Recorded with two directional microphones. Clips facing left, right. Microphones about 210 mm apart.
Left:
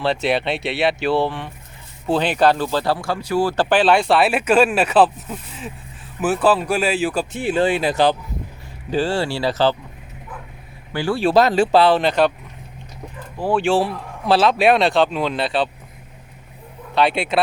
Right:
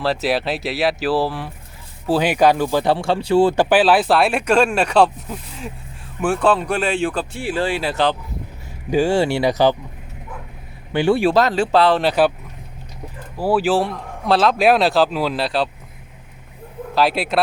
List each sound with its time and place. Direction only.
0.0 s speech: centre (ahead or behind); by 3.5 s 25° right (ahead or behind)
3.5 s speech: 10° right (ahead or behind); by 7.3 s 5° left (ahead or behind)
7.3 s speech: 20° left (ahead or behind)
8.9 s speech: 15° right (ahead or behind)
10.9 s speech: 20° right (ahead or behind)
11.3 s speech: 10° left (ahead or behind)
13.3 s speech: 5° right (ahead or behind)
16.9 s speech: centre (ahead or behind)